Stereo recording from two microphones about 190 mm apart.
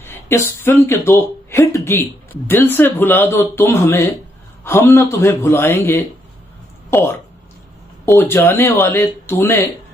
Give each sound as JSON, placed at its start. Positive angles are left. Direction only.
{"t": 0.0, "sound": "speech", "side_deg": 15}